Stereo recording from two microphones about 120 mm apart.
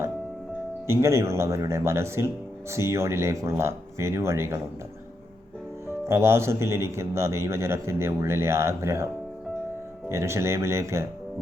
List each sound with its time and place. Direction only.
0.9 s speech: 20° right (ahead or behind)
6.1 s speech: 20° right (ahead or behind)
10.1 s speech: 25° right (ahead or behind)